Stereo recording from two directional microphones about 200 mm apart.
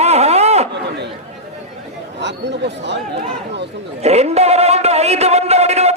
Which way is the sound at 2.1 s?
60° right (ahead or behind).